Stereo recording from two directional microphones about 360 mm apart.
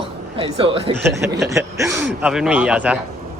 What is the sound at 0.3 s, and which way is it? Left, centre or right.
A man's voice, centre.